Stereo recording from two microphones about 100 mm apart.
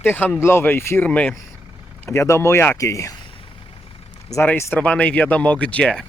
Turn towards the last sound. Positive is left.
turn(degrees=10)  # may be behind; listen again after turning